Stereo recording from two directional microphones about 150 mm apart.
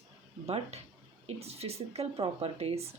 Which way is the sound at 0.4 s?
45° right (ahead or behind).